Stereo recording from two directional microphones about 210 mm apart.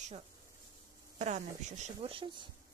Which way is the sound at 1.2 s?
35° right (ahead or behind).